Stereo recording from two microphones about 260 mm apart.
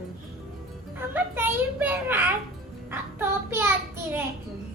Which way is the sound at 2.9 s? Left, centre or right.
Centre.